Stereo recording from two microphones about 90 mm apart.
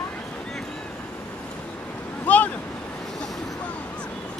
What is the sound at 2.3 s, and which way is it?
Waves, 15° left (ahead or behind).